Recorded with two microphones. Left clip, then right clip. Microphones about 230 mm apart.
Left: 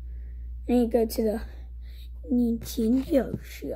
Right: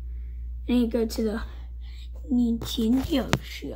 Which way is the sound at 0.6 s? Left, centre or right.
Right.